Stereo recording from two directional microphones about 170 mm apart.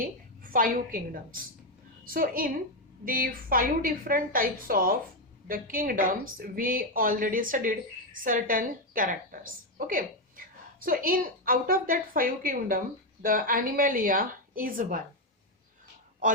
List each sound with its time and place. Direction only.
0.0 s a woman's voice: 55° right (ahead or behind)